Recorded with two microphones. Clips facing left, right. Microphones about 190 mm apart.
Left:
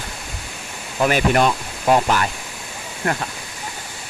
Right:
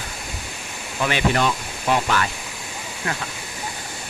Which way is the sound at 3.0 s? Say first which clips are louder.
Left 6 dB; 45° left (ahead or behind).